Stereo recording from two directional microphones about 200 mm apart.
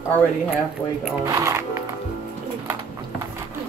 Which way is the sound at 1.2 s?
15° right (ahead or behind).